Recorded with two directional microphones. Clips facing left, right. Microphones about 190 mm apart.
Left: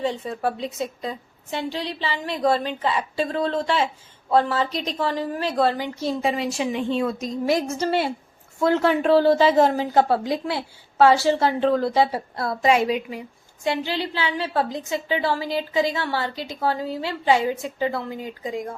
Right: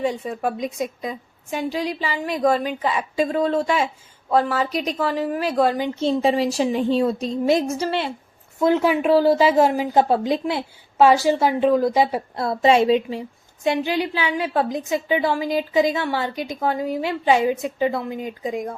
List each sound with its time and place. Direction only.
0.0 s a woman's voice: 15° right (ahead or behind)
7.9 s speech: 5° left (ahead or behind)
8.5 s a woman's voice: 15° right (ahead or behind)
13.7 s a woman's voice: 15° right (ahead or behind)